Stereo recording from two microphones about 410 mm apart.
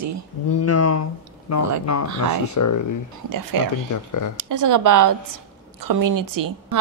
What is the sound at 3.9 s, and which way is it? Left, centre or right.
Speech, left.